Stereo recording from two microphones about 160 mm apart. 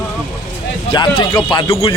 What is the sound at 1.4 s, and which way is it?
Speech, 30° left (ahead or behind).